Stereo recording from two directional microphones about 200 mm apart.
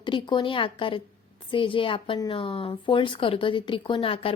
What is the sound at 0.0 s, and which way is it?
Speech, 25° left (ahead or behind).